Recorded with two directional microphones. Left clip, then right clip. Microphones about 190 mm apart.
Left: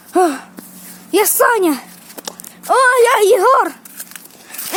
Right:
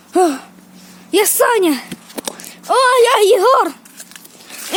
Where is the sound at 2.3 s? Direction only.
35° right (ahead or behind).